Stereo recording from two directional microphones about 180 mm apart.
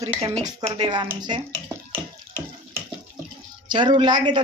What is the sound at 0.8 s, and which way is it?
Speech, 25° right (ahead or behind).